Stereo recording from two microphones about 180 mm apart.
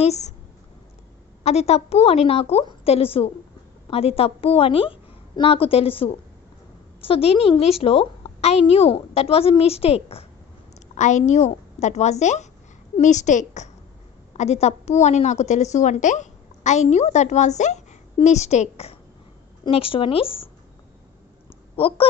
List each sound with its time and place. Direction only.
0.0 s a woman's voice: 35° left (ahead or behind)
1.4 s a woman's voice: 35° left (ahead or behind)
21.7 s speech: 30° left (ahead or behind)